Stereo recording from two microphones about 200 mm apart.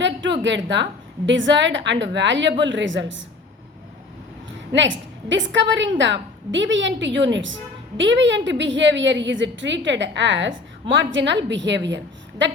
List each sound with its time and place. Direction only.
0.0 s a sound: 65° right (ahead or behind)
1.3 s a woman's voice: 65° right (ahead or behind)
4.7 s a woman's voice: 65° right (ahead or behind)